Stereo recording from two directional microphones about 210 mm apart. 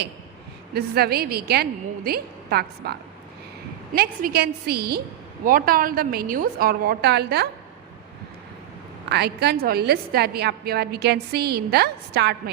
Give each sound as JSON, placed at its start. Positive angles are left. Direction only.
{"t": 0.7, "sound": "a woman's voice", "side_deg": -50}
{"t": 9.0, "sound": "a woman's voice", "side_deg": -50}